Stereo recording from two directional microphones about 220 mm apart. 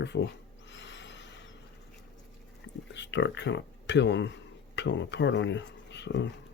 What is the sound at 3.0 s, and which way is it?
Speech, 55° left (ahead or behind).